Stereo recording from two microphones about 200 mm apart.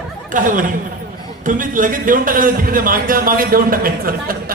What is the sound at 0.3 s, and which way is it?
A man's voice, 40° right (ahead or behind).